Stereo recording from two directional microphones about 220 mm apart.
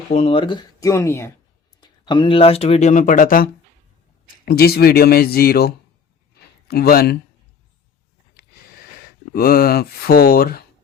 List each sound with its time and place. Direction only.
0.1 s speech: 25° left (ahead or behind); by 7.2 s 45° left (ahead or behind)
9.3 s speech: 40° left (ahead or behind)